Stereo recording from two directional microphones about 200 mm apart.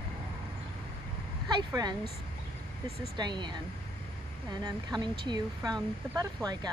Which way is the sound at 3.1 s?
20° right (ahead or behind).